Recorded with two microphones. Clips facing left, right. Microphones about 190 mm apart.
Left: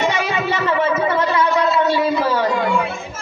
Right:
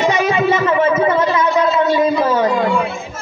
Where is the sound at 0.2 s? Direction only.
20° right (ahead or behind).